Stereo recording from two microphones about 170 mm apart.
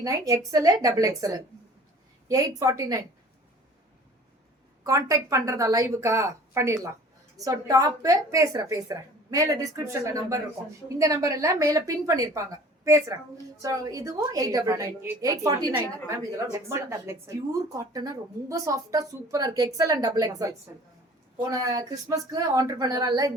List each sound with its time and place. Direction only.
0.0 s speech: 20° right (ahead or behind)
4.8 s speech: 20° right (ahead or behind)